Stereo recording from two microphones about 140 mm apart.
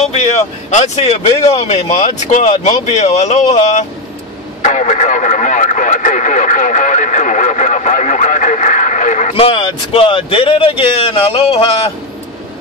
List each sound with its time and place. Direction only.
0.1 s speech: 55° left (ahead or behind)
9.3 s speech: 40° left (ahead or behind)